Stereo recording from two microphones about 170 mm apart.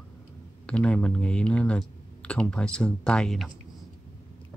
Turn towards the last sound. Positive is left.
turn(degrees=5)  # may be behind; listen again after turning